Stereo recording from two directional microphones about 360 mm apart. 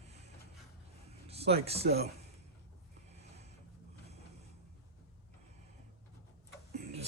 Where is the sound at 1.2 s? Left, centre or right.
Centre.